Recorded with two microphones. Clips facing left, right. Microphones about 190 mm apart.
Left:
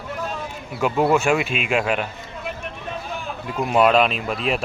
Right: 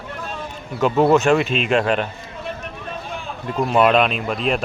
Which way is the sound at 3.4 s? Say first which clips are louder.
Right 1 dB; 5° left (ahead or behind).